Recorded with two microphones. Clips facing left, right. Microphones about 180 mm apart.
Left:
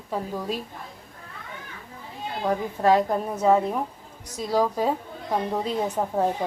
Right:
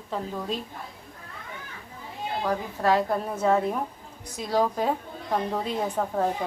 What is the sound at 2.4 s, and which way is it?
A woman's voice, 20° left (ahead or behind).